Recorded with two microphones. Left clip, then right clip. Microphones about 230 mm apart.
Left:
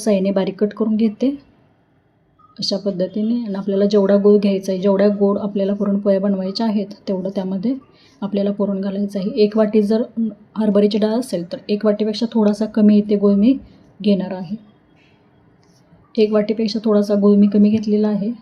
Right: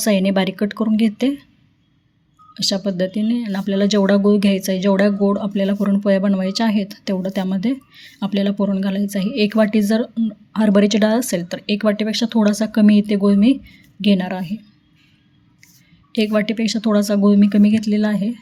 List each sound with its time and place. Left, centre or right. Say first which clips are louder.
0.0 s speech: even; right
2.6 s speech: even; right
16.1 s speech: left 3 dB; right